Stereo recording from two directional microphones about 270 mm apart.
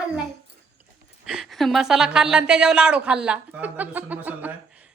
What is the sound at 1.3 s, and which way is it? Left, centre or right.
A woman's voice, centre.